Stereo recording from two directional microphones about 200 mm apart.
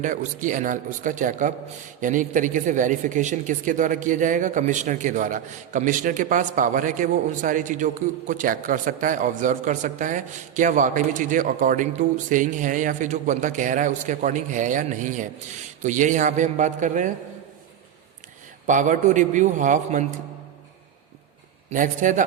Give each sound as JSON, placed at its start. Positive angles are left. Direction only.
{"t": 0.0, "sound": "a man's voice", "side_deg": -40}
{"t": 18.6, "sound": "a man's voice", "side_deg": -40}
{"t": 21.7, "sound": "a man's voice", "side_deg": -40}